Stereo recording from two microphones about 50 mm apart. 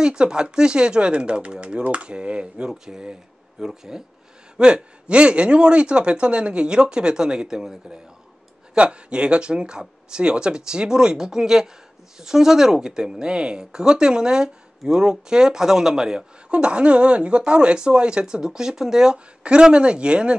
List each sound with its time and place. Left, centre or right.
0.0 s a man's voice: centre